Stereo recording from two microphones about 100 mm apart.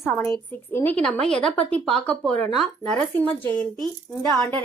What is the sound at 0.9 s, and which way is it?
Speech, 10° left (ahead or behind).